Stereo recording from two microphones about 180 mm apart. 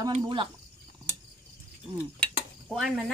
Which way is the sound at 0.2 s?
25° right (ahead or behind).